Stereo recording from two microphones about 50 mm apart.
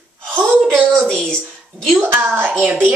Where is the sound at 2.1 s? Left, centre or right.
Right.